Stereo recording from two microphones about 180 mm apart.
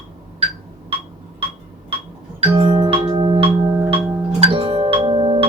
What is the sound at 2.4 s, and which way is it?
Music, 30° right (ahead or behind).